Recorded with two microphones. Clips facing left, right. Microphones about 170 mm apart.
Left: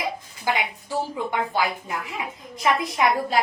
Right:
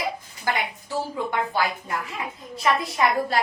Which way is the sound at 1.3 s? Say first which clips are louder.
Even; 15° left (ahead or behind).